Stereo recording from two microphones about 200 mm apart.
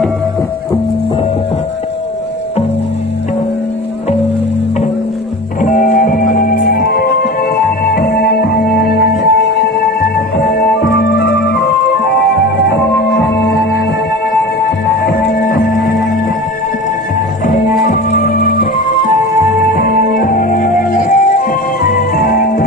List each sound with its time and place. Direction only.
5.6 s music: 40° left (ahead or behind); by 11.6 s 55° left (ahead or behind)
12.7 s music: 55° left (ahead or behind)
15.0 s music: 50° left (ahead or behind)
17.5 s music: 35° left (ahead or behind)
19.6 s music: 45° left (ahead or behind)